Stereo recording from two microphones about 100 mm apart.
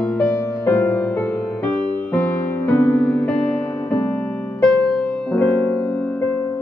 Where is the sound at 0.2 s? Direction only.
25° left (ahead or behind).